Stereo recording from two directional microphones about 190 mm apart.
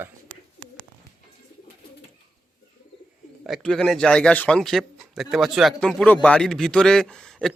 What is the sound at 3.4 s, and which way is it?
A man's voice, centre (ahead or behind).